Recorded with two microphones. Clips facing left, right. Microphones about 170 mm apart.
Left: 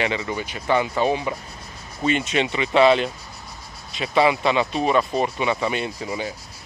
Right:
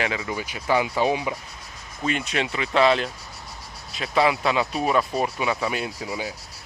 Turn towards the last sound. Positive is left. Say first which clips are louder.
# left 2 dB
turn(degrees=-5)  # may be behind; listen again after turning